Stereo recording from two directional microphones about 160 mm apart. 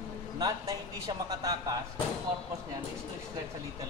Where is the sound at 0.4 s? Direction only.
20° right (ahead or behind).